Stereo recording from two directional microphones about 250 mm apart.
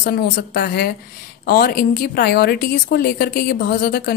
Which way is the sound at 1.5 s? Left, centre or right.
Left.